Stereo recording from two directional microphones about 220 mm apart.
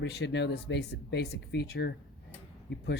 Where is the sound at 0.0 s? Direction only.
50° left (ahead or behind).